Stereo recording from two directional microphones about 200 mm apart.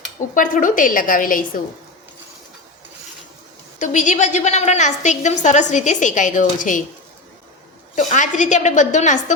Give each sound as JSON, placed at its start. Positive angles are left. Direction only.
{"t": 0.3, "sound": "a woman's voice", "side_deg": 40}
{"t": 3.8, "sound": "a woman's voice", "side_deg": 40}
{"t": 7.9, "sound": "a woman's voice", "side_deg": 40}